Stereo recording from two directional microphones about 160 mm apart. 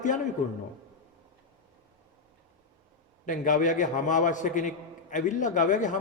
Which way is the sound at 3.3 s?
55° left (ahead or behind).